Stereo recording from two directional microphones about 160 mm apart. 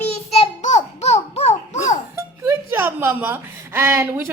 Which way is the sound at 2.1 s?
15° right (ahead or behind).